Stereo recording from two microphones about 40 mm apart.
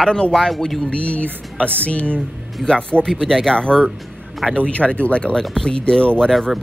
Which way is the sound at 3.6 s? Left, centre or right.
Left.